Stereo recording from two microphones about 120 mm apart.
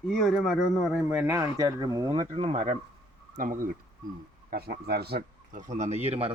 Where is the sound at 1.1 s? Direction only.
15° right (ahead or behind); by 2.1 s 30° right (ahead or behind).